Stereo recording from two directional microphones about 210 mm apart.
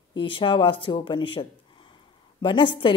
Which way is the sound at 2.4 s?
25° left (ahead or behind).